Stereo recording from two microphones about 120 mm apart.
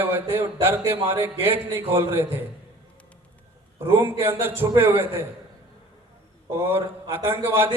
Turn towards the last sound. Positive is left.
turn(degrees=-20)  # may be behind; listen again after turning